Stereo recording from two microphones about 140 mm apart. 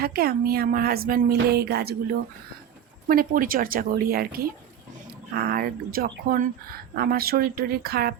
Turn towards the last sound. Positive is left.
turn(degrees=-90)